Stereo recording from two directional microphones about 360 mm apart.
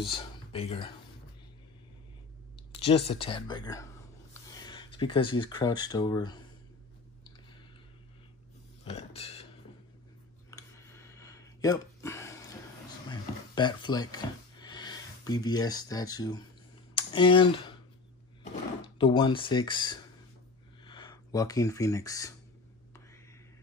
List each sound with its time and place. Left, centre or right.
0.0 s speech: centre
2.8 s speech: centre
8.8 s a sound: centre
10.5 s a sound: centre
16.9 s speech: centre
18.9 s speech: centre